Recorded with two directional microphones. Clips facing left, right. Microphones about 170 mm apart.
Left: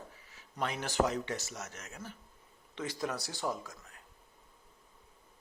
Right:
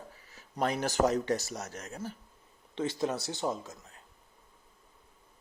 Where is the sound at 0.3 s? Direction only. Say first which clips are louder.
Right 6 dB; 40° right (ahead or behind).